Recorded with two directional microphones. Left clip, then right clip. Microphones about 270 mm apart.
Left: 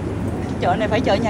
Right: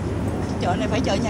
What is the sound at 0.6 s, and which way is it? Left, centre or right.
Speech, centre.